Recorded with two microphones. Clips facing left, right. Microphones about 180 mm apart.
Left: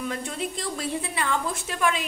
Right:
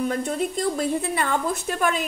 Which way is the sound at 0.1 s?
45° right (ahead or behind).